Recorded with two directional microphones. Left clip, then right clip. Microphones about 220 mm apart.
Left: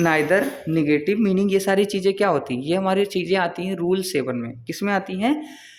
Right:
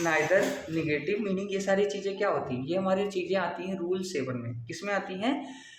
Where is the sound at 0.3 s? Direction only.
55° left (ahead or behind).